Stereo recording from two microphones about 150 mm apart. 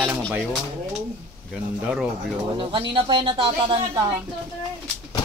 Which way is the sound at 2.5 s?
35° right (ahead or behind).